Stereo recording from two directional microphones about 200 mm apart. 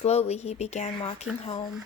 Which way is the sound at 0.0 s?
30° left (ahead or behind).